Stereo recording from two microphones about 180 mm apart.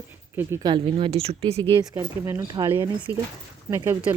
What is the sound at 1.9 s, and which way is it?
Speech, 15° right (ahead or behind).